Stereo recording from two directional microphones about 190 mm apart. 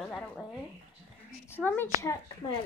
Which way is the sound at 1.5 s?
10° left (ahead or behind).